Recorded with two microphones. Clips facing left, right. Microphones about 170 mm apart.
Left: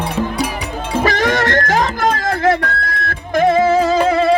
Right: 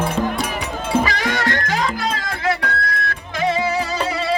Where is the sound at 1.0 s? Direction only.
45° left (ahead or behind).